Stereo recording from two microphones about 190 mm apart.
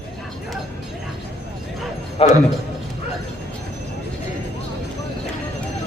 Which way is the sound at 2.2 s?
30° left (ahead or behind).